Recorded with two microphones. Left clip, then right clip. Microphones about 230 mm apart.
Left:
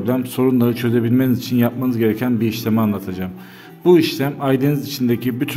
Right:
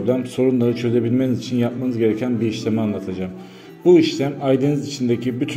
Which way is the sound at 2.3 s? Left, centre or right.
Left.